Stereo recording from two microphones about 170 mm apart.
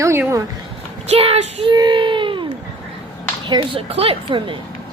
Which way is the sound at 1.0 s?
35° right (ahead or behind).